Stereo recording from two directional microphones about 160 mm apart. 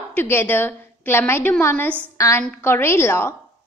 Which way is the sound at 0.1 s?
15° left (ahead or behind).